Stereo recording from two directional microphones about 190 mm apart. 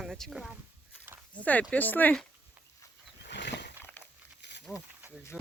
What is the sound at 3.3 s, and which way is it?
Wild animals, 65° left (ahead or behind).